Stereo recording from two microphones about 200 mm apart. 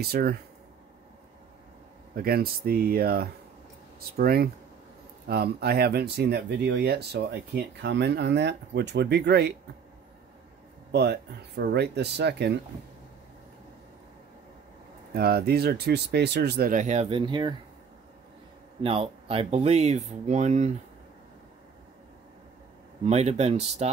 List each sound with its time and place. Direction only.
0.0 s speech: 50° right (ahead or behind)
2.1 s speech: 50° right (ahead or behind)
10.9 s speech: 55° right (ahead or behind)
15.1 s speech: 50° right (ahead or behind); by 17.6 s 20° right (ahead or behind)
18.8 s speech: 30° right (ahead or behind)
23.0 s speech: 35° right (ahead or behind)